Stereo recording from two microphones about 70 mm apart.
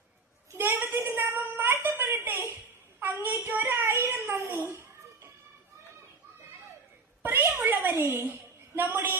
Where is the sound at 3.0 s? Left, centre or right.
Right.